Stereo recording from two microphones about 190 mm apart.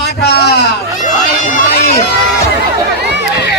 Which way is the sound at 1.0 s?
45° left (ahead or behind).